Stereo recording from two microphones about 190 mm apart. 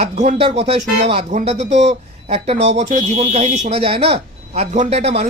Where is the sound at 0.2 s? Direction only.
35° right (ahead or behind).